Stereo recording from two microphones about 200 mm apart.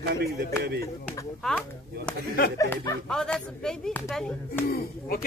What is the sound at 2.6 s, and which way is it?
Speech, 15° left (ahead or behind).